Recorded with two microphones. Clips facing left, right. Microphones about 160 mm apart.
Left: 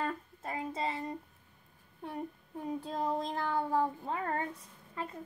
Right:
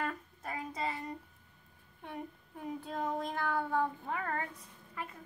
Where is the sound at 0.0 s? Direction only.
25° left (ahead or behind).